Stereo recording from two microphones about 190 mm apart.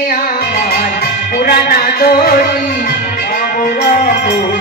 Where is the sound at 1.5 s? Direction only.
50° left (ahead or behind).